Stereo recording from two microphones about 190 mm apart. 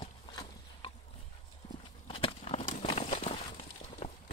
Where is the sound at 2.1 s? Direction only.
30° left (ahead or behind).